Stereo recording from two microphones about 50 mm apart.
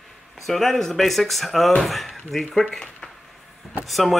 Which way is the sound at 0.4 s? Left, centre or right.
Centre.